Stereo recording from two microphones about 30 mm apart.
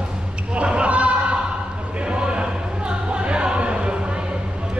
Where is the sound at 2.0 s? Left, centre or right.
Right.